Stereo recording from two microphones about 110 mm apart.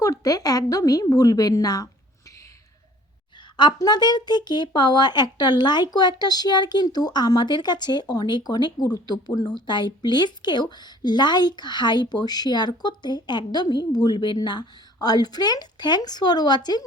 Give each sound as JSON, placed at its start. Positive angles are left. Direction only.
{"t": 0.0, "sound": "a woman's voice", "side_deg": 35}
{"t": 3.6, "sound": "a woman's voice", "side_deg": 40}